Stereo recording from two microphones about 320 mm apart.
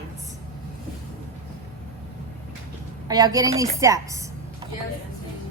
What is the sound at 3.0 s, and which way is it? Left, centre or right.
A woman's voice, centre.